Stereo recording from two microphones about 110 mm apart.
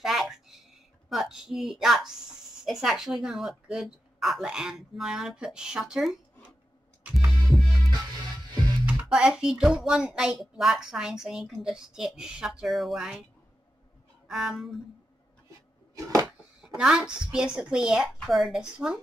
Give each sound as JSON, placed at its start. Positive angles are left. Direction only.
{"t": 0.0, "sound": "a sound", "side_deg": -5}
{"t": 1.0, "sound": "a woman's voice", "side_deg": -5}
{"t": 8.8, "sound": "speech", "side_deg": -5}
{"t": 14.2, "sound": "speech", "side_deg": -5}
{"t": 15.9, "sound": "a sound", "side_deg": -30}
{"t": 16.6, "sound": "a woman's voice", "side_deg": -5}